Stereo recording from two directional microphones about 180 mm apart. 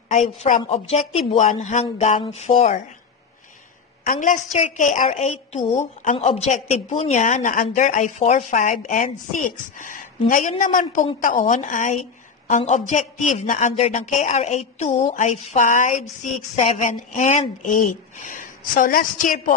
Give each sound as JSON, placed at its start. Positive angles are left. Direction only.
{"t": 0.1, "sound": "speech", "side_deg": 40}
{"t": 4.0, "sound": "speech", "side_deg": 45}